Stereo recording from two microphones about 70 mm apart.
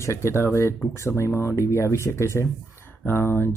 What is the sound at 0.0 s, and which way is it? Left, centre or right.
Speech, left.